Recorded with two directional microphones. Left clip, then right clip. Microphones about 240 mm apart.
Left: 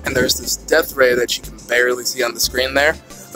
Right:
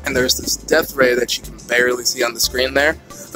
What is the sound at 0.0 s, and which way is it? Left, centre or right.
Speech, centre.